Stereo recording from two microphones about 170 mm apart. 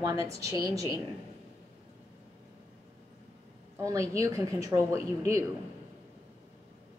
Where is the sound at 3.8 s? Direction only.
20° right (ahead or behind).